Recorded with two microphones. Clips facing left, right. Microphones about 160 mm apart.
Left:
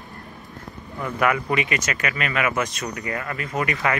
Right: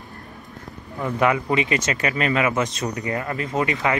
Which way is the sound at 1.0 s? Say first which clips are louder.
Right 2 dB; 20° right (ahead or behind).